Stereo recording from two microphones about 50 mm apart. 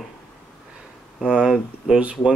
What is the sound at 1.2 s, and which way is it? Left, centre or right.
Speech, centre.